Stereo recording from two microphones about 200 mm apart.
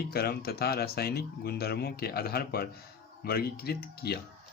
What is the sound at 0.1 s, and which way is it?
Speech, 50° left (ahead or behind).